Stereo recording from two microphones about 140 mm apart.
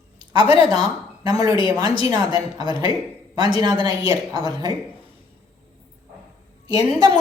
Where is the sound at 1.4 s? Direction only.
30° right (ahead or behind).